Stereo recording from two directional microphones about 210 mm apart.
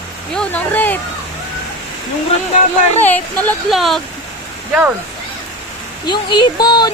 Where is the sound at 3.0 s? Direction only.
5° left (ahead or behind).